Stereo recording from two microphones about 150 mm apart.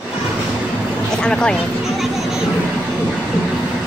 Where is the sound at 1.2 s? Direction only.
5° left (ahead or behind).